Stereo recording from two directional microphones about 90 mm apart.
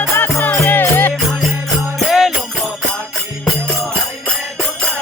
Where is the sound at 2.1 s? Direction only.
Centre (ahead or behind).